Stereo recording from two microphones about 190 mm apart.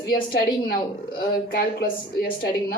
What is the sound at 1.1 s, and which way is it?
Speech, 55° left (ahead or behind).